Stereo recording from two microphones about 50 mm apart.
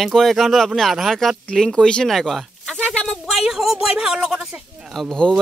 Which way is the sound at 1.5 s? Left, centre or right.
Centre.